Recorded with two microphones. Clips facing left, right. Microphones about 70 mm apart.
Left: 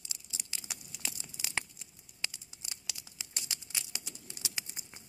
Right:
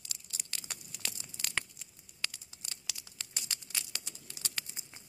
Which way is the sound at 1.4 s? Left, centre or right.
Centre.